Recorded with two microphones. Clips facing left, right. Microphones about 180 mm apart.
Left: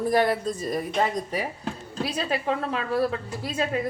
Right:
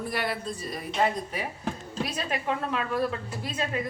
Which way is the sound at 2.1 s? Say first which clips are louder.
Left 5 dB; 30° left (ahead or behind).